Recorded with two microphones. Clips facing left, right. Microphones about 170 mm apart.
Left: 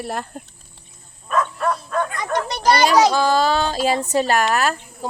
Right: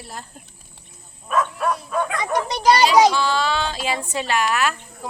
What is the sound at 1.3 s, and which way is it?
Bow-wow, 5° right (ahead or behind).